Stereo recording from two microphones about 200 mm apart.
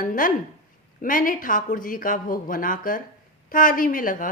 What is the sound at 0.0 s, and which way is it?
A woman's voice, 45° left (ahead or behind).